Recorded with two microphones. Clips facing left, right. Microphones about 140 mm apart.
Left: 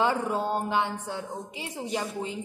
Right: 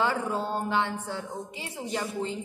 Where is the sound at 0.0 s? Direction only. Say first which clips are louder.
Left 2 dB; 15° left (ahead or behind).